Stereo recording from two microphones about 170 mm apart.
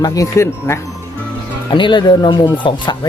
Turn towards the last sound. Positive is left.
turn(degrees=25)  # may be behind; listen again after turning